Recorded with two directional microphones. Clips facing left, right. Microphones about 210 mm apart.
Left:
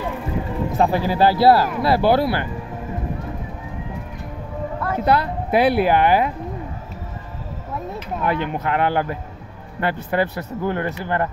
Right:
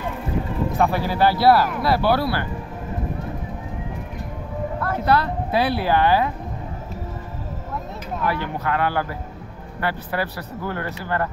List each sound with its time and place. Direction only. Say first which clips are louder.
0.7 s speech: left 3 dB; 20° left (ahead or behind)
5.0 s speech: left 1 dB; 20° left (ahead or behind)
8.2 s speech: left 3 dB; 20° left (ahead or behind)